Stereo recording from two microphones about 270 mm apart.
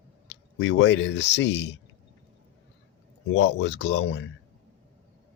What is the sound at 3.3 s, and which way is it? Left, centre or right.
Speech, left.